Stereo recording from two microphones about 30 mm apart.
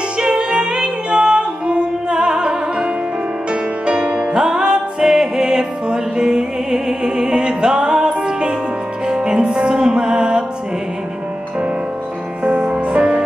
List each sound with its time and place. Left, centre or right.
0.2 s music: right
12.4 s music: right